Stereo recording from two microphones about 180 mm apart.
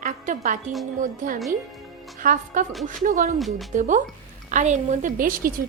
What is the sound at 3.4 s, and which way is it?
Speech, centre (ahead or behind).